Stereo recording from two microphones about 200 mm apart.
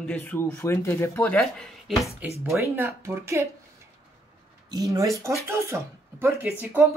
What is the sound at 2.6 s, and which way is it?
Speech, 15° right (ahead or behind).